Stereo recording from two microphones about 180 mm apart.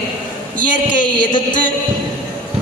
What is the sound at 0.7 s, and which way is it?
Speech, 45° left (ahead or behind).